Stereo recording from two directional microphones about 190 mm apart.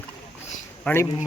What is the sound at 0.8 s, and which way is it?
Speech, 10° left (ahead or behind).